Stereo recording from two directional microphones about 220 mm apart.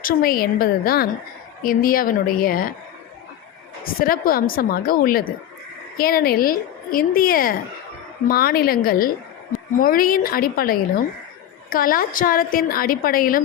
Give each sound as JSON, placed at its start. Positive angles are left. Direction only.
{"t": 0.0, "sound": "a woman's voice", "side_deg": 40}
{"t": 4.0, "sound": "a woman's voice", "side_deg": 40}